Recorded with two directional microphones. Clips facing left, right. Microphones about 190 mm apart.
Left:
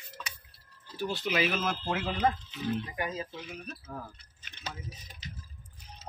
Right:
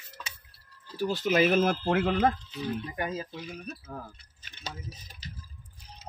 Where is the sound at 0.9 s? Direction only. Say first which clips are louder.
Right 5 dB; 40° right (ahead or behind).